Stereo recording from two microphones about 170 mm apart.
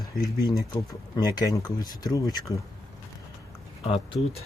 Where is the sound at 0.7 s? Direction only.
25° left (ahead or behind).